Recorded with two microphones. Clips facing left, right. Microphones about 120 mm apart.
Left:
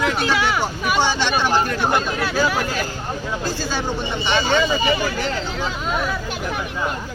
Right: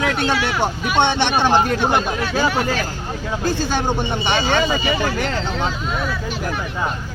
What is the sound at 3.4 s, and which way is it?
Speech, 55° right (ahead or behind).